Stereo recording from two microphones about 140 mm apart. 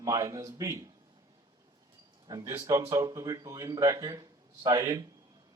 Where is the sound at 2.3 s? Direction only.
25° right (ahead or behind).